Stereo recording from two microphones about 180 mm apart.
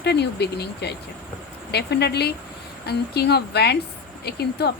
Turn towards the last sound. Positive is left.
turn(degrees=65)  # may be behind; listen again after turning